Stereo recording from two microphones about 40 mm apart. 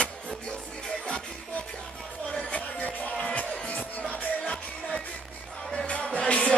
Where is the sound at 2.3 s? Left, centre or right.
Left.